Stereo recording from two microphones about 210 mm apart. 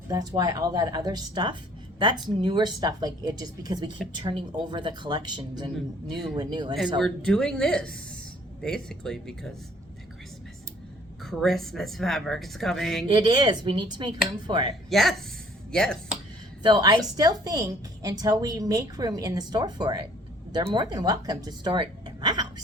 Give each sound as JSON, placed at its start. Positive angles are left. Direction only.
{"t": 0.1, "sound": "speech", "side_deg": -20}
{"t": 7.0, "sound": "a woman's voice", "side_deg": 5}
{"t": 11.2, "sound": "a woman's voice", "side_deg": 0}
{"t": 13.1, "sound": "speech", "side_deg": -20}
{"t": 14.8, "sound": "a woman's voice", "side_deg": 0}
{"t": 16.6, "sound": "a woman's voice", "side_deg": -20}